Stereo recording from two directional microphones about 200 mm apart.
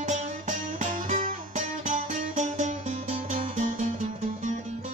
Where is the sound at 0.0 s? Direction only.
35° right (ahead or behind).